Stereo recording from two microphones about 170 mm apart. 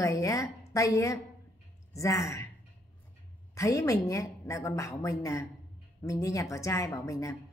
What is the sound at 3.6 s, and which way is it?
A woman's voice, 20° left (ahead or behind).